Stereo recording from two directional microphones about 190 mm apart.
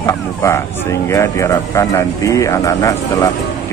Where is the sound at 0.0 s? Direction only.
15° left (ahead or behind).